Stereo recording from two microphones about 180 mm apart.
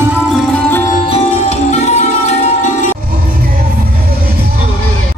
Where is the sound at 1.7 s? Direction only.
40° left (ahead or behind).